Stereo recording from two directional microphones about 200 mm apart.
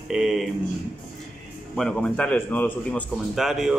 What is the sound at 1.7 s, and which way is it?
A man's voice, 5° left (ahead or behind).